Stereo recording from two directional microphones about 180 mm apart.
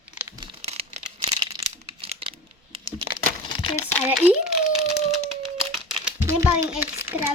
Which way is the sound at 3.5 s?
25° left (ahead or behind).